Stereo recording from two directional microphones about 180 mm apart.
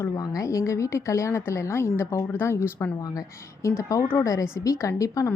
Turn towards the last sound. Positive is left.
turn(degrees=15)  # may be behind; listen again after turning